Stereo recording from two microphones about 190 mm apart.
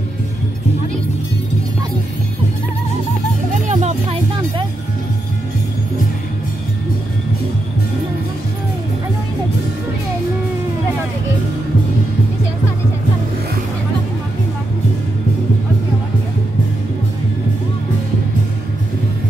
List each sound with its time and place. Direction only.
3.6 s music: 35° right (ahead or behind)